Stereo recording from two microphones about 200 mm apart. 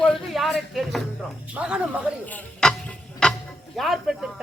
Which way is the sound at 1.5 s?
5° right (ahead or behind).